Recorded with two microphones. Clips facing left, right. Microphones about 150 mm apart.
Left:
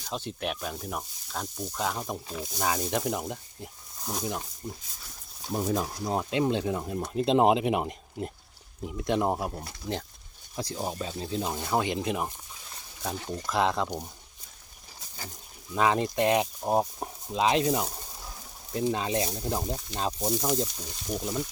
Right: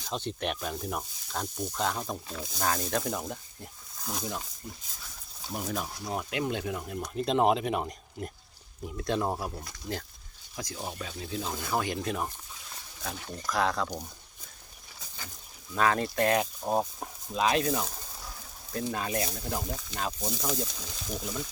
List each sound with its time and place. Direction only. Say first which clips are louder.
0.1 s speech: even; 5° left (ahead or behind); by 14.0 s 20° left (ahead or behind)
15.7 s speech: left 2 dB; 20° left (ahead or behind)